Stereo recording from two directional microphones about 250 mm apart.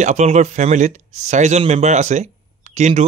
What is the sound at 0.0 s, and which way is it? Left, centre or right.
Speech, right.